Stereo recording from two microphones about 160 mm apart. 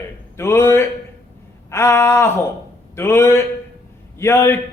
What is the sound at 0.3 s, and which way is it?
A man's voice, 15° left (ahead or behind).